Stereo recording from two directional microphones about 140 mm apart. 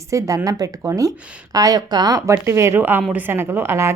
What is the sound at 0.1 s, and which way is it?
A woman's voice, 20° right (ahead or behind).